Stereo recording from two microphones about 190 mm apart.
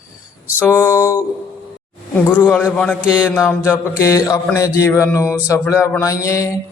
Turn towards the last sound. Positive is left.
turn(degrees=15)  # may be behind; listen again after turning